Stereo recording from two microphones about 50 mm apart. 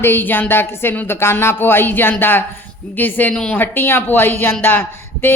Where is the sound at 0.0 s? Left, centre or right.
Left.